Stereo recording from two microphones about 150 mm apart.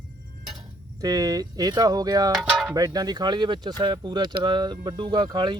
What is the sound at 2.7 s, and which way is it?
Speech, 25° right (ahead or behind).